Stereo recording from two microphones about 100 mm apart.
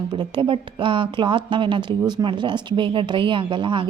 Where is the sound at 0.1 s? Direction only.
55° right (ahead or behind).